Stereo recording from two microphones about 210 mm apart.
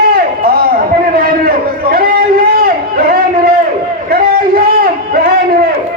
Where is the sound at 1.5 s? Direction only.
45° right (ahead or behind).